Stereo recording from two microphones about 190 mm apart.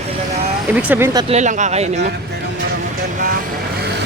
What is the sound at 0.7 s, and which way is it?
Speech, 10° right (ahead or behind).